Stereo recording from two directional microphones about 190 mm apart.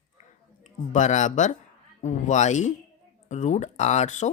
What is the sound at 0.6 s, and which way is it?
Speech, 40° left (ahead or behind).